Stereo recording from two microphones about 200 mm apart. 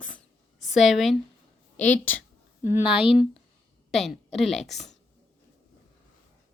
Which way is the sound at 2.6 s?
10° right (ahead or behind).